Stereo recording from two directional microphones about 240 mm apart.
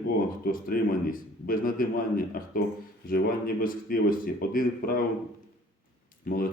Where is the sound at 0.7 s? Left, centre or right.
Left.